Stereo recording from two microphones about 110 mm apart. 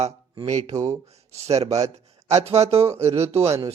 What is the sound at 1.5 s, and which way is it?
Speech, 75° right (ahead or behind).